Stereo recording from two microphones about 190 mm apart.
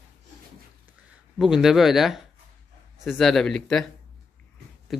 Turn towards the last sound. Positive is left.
turn(degrees=0)  # may be behind; listen again after turning